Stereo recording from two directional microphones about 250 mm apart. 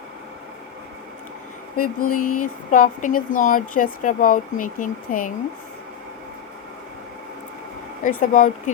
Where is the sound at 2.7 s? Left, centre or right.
Left.